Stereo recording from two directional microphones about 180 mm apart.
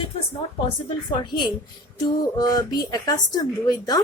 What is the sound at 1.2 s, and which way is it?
A woman's voice, 25° left (ahead or behind).